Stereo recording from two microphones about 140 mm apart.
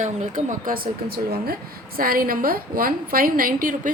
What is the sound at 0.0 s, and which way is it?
A woman's voice, 60° right (ahead or behind).